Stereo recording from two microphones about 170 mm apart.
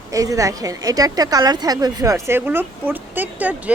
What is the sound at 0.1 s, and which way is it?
A woman's voice, 20° right (ahead or behind).